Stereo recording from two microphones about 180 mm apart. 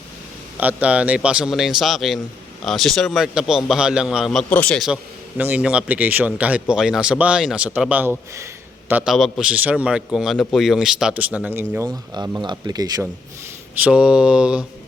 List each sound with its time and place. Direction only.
0.5 s a man's voice: 10° right (ahead or behind)
12.1 s speech: 20° right (ahead or behind)
13.8 s a man's voice: 5° right (ahead or behind)